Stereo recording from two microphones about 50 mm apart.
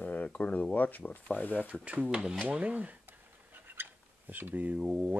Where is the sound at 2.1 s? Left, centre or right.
Centre.